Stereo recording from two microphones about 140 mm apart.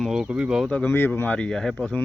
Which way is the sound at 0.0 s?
5° right (ahead or behind).